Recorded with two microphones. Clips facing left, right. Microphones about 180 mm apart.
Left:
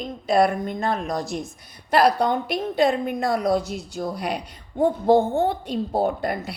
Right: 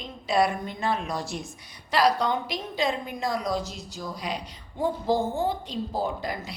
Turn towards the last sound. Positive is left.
turn(degrees=60)  # may be behind; listen again after turning